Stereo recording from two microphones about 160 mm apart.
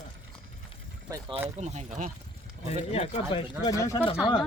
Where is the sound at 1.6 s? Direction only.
45° right (ahead or behind).